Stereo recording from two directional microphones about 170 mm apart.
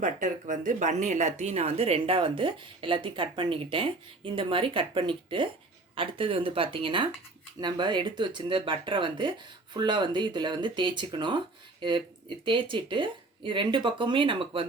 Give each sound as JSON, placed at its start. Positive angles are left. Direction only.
{"t": 0.0, "sound": "speech", "side_deg": -50}